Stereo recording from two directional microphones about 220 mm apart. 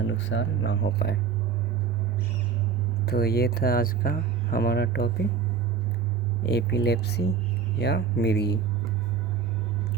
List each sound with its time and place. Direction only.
0.1 s speech: 60° left (ahead or behind)
3.1 s speech: 45° left (ahead or behind)
6.4 s speech: 50° left (ahead or behind)